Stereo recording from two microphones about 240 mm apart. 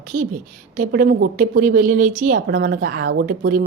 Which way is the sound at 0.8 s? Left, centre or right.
Right.